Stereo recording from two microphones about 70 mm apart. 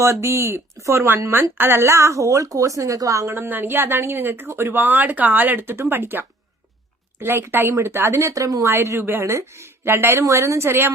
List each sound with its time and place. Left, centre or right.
0.0 s a woman's voice: right
1.8 s a woman's voice: right
3.3 s speech: right
8.3 s a woman's voice: right
8.6 s speech: right
10.2 s speech: right